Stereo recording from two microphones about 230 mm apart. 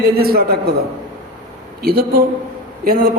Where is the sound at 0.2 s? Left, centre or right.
Right.